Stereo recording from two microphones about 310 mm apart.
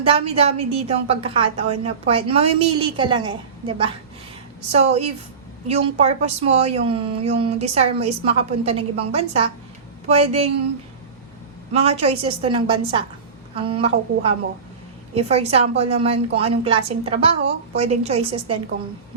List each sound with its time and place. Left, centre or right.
0.1 s a woman's voice: centre
4.7 s a woman's voice: right
11.7 s a woman's voice: centre